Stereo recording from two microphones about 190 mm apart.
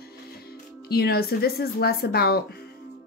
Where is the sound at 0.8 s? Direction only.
55° left (ahead or behind).